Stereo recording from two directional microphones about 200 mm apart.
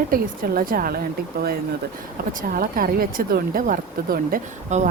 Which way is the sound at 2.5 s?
45° right (ahead or behind).